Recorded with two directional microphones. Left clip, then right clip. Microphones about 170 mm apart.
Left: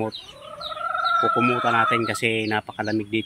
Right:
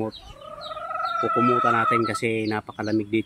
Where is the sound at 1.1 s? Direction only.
35° left (ahead or behind).